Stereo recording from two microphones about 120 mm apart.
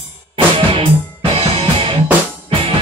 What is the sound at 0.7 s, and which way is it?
Music, 50° right (ahead or behind).